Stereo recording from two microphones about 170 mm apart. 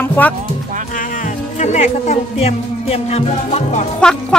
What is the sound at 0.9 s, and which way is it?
Speech, 50° left (ahead or behind).